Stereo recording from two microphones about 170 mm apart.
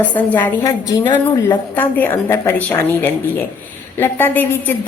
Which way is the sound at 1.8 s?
10° left (ahead or behind).